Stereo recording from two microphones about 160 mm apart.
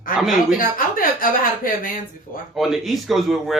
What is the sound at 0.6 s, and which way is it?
Speech, 60° left (ahead or behind).